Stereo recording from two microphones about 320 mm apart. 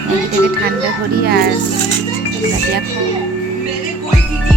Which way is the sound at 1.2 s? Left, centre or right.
Right.